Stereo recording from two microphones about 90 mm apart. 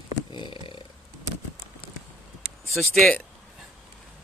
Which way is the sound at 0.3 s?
70° left (ahead or behind).